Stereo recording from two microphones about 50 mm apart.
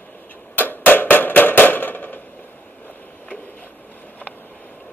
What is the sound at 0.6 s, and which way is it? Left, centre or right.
Hammer, left.